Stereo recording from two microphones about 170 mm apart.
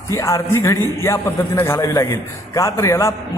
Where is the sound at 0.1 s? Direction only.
15° left (ahead or behind).